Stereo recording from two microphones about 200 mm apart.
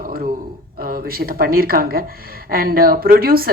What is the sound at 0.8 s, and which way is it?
A woman's voice, 45° right (ahead or behind).